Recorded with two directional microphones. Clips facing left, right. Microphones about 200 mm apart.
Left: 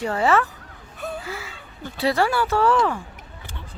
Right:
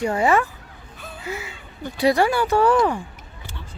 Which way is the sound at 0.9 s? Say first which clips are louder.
Left 9 dB; 45° left (ahead or behind).